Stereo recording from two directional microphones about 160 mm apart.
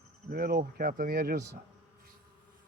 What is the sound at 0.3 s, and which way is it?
Speech, 65° right (ahead or behind).